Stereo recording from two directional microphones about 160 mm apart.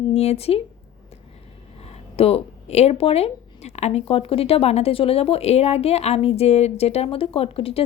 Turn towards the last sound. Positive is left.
turn(degrees=35)  # may be behind; listen again after turning